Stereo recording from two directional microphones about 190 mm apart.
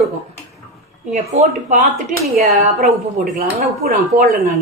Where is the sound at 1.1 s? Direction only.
40° right (ahead or behind).